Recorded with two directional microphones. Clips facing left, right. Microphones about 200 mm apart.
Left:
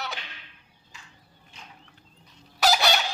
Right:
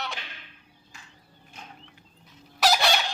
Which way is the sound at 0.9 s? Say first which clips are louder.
Even; 50° right (ahead or behind).